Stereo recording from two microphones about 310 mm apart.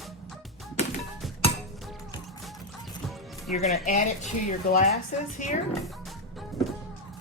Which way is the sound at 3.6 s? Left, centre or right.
Left.